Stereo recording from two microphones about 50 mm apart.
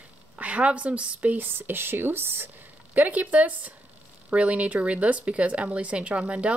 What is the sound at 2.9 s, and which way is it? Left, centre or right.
Speech, right.